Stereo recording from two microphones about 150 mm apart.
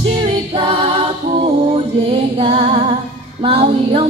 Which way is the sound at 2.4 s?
40° right (ahead or behind).